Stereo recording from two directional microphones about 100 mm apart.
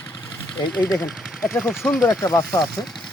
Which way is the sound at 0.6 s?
45° left (ahead or behind).